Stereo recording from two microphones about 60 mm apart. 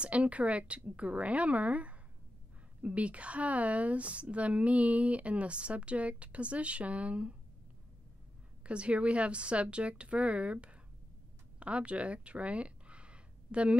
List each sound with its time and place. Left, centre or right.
0.0 s a woman's voice: right
8.6 s a woman's voice: right